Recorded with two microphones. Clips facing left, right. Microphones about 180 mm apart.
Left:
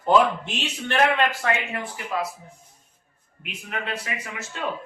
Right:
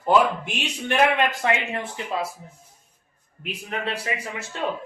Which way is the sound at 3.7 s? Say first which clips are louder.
Right 2 dB; 30° right (ahead or behind).